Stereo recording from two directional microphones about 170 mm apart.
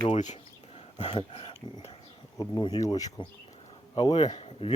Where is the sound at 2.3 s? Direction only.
20° left (ahead or behind).